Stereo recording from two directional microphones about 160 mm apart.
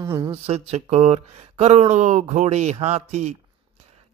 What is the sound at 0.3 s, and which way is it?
Speech, 40° right (ahead or behind).